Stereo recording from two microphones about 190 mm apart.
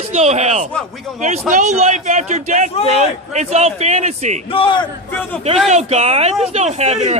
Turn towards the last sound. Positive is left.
turn(degrees=-35)  # may be behind; listen again after turning